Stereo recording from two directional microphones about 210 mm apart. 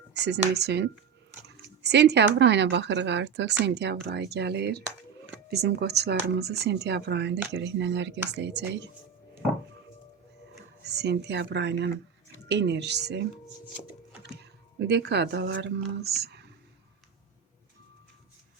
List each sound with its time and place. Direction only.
0.1 s speech: 55° right (ahead or behind)
10.8 s speech: 50° right (ahead or behind)
14.8 s speech: 55° right (ahead or behind)